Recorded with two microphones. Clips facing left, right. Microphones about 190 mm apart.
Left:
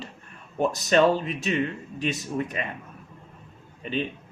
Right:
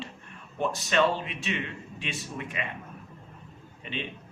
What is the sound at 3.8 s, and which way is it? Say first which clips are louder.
Speech: left 8 dB; 40° left (ahead or behind).